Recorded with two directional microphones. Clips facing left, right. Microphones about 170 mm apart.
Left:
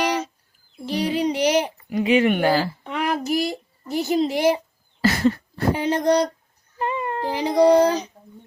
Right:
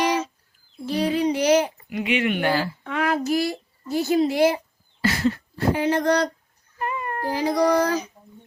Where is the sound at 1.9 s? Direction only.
40° left (ahead or behind).